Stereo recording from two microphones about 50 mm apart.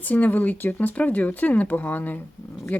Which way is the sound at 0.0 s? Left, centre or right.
Left.